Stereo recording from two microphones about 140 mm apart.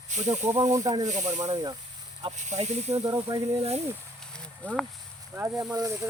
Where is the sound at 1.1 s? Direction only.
60° right (ahead or behind).